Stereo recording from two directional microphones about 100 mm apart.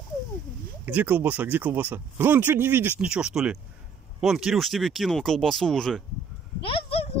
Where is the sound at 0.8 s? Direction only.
15° right (ahead or behind).